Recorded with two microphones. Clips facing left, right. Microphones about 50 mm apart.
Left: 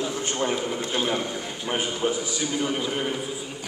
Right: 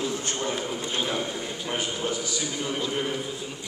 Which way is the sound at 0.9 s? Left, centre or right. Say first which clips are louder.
Left 2 dB; centre.